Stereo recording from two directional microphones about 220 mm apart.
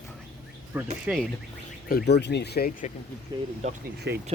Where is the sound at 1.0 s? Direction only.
5° right (ahead or behind).